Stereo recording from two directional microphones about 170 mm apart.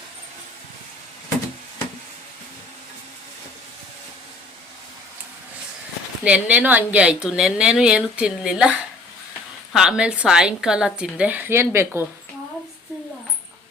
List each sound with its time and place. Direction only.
6.2 s a woman's voice: 10° right (ahead or behind)